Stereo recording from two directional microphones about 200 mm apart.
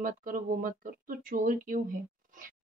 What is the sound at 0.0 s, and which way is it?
Speech, 45° right (ahead or behind).